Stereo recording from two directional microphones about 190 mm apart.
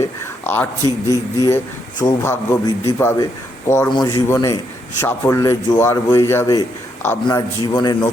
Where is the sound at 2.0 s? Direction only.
15° left (ahead or behind).